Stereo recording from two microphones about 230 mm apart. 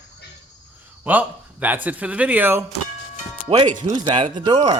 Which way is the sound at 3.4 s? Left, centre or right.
Right.